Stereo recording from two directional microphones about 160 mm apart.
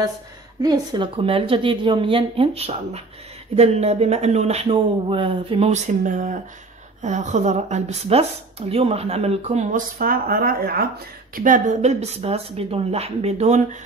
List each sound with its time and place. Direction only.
0.6 s speech: 25° right (ahead or behind)
6.0 s a woman's voice: 55° right (ahead or behind); by 10.9 s 75° right (ahead or behind)
11.3 s a woman's voice: 55° right (ahead or behind)